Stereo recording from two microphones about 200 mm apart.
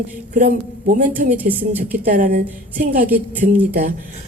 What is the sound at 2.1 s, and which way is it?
A woman's voice, 40° right (ahead or behind).